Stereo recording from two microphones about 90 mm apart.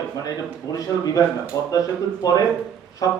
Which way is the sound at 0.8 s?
45° left (ahead or behind).